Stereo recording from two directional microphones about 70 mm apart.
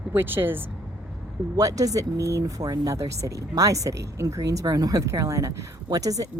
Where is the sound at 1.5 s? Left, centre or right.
Right.